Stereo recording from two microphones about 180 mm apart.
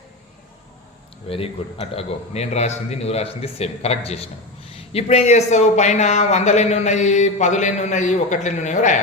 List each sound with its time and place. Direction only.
1.3 s speech: 30° left (ahead or behind)